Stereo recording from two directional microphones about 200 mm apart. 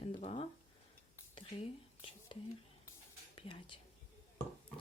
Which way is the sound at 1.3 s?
25° left (ahead or behind).